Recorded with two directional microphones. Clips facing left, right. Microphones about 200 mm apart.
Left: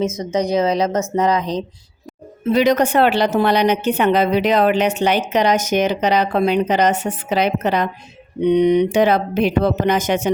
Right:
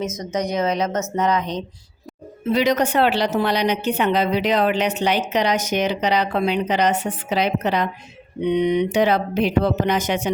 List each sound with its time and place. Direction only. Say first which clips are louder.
0.0 s a woman's voice: left 5 dB; 30° left (ahead or behind)
2.5 s a woman's voice: left 4 dB; 50° left (ahead or behind)